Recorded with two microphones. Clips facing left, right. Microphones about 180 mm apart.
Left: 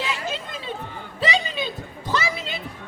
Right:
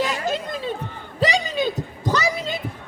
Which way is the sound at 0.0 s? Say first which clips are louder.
Right 5 dB; 40° right (ahead or behind).